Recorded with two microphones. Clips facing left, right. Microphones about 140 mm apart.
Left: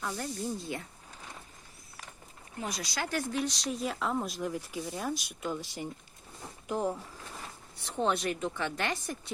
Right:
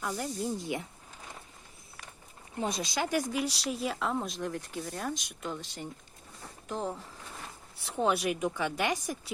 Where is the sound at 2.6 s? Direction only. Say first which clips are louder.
Right 4 dB; 25° right (ahead or behind); by 7.0 s 10° left (ahead or behind).